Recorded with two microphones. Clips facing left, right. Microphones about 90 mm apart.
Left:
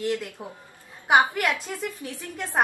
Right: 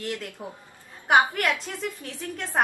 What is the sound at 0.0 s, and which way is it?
Speech, 15° left (ahead or behind).